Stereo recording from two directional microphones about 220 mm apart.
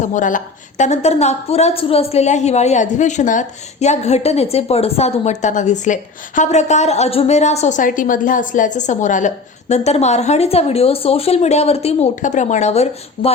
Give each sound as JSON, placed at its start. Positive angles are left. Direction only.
{"t": 0.0, "sound": "a woman's voice", "side_deg": 35}